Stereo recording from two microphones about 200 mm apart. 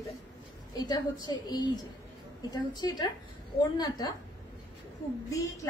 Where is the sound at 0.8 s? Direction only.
20° left (ahead or behind).